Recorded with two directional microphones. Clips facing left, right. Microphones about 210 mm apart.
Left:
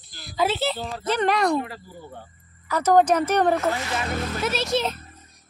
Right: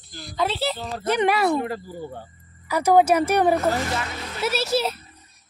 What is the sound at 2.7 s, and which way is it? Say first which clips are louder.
A child's voice: right 1 dB; 10° right (ahead or behind).